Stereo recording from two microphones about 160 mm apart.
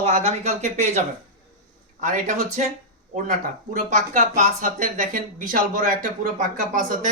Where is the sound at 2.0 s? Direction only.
50° right (ahead or behind).